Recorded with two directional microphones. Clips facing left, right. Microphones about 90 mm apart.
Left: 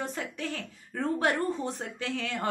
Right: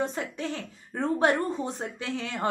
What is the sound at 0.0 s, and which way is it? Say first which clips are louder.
A woman's voice: right 4 dB; 20° right (ahead or behind).